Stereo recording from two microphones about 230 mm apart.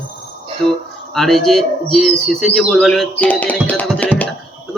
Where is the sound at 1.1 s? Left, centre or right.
Centre.